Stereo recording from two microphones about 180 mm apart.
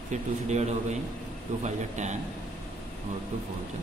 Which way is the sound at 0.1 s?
40° right (ahead or behind).